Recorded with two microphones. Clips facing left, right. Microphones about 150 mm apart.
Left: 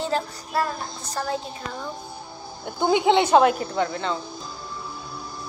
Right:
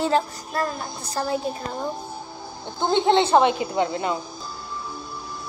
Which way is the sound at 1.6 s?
40° right (ahead or behind).